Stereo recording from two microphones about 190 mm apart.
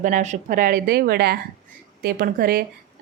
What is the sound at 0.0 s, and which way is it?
A woman's voice, 40° right (ahead or behind).